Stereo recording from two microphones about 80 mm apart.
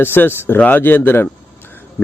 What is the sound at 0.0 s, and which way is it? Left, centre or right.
Speech, left.